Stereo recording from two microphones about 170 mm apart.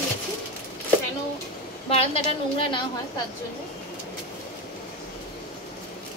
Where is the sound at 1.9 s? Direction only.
35° left (ahead or behind).